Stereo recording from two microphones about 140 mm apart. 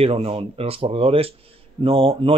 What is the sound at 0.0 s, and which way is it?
Speech, 45° right (ahead or behind).